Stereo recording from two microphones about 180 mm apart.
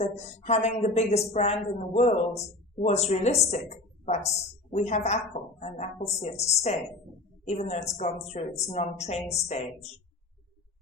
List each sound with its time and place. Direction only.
0.0 s a woman's voice: 35° left (ahead or behind)